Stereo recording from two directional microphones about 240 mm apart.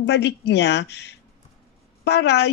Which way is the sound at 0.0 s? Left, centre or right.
Left.